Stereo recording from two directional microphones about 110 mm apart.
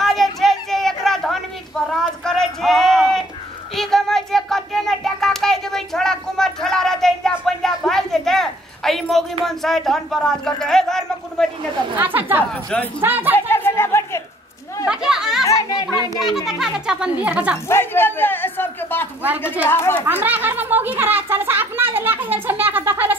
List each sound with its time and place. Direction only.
0.0 s a sound: centre (ahead or behind)
9.4 s speech: 5° left (ahead or behind)
12.0 s speech: 15° right (ahead or behind)
13.5 s chatter: 20° left (ahead or behind)
14.9 s chatter: 5° right (ahead or behind)
15.4 s a sound: 30° left (ahead or behind)
16.4 s speech: 5° right (ahead or behind)
17.6 s music: 20° left (ahead or behind)
19.7 s speech: 20° left (ahead or behind)
20.1 s a sound: 15° right (ahead or behind)